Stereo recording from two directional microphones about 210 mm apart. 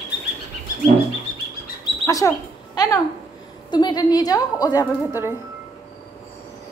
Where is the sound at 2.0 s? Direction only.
15° left (ahead or behind).